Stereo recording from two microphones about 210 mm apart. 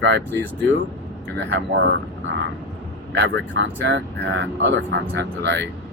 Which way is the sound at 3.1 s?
55° right (ahead or behind).